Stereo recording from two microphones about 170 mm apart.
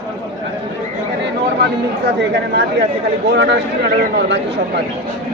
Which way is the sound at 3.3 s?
90° right.